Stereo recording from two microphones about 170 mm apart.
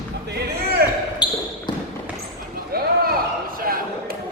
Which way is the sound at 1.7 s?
25° left (ahead or behind).